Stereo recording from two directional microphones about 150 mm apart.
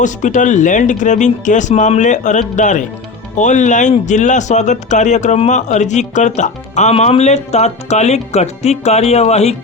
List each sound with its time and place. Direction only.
0.0 s speech: 55° left (ahead or behind)